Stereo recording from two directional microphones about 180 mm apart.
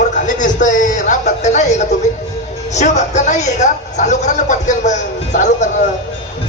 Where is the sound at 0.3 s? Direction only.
45° left (ahead or behind).